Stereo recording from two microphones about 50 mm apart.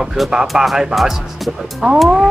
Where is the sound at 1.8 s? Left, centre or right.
Centre.